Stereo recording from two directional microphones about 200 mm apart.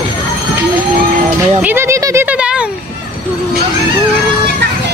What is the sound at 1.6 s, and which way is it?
Speech, 10° right (ahead or behind).